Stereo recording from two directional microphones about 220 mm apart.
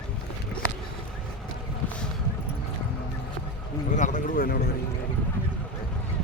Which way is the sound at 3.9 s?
35° left (ahead or behind).